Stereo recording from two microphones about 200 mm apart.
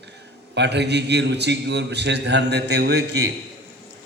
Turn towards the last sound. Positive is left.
turn(degrees=-55)  # may be behind; listen again after turning